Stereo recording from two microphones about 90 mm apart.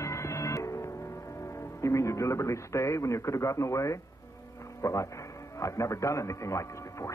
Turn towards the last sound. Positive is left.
turn(degrees=35)  # may be behind; listen again after turning